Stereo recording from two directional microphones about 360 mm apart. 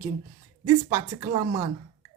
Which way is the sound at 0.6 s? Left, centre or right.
Centre.